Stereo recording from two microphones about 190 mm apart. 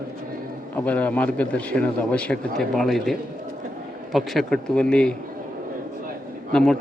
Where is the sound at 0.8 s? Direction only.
5° left (ahead or behind).